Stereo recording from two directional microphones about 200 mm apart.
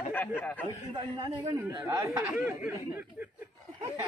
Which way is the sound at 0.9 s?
20° right (ahead or behind).